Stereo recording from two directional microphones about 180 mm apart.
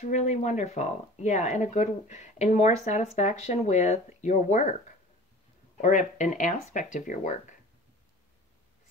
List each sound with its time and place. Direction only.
0.0 s speech: 40° left (ahead or behind)
5.8 s speech: 45° left (ahead or behind)